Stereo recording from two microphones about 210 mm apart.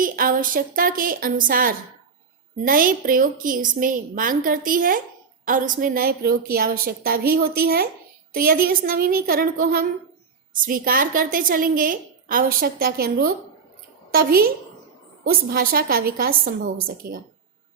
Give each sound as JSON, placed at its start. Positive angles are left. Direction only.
{"t": 0.0, "sound": "a woman's voice", "side_deg": -40}